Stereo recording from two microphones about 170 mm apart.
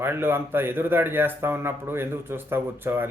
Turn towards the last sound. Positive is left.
turn(degrees=-10)  # may be behind; listen again after turning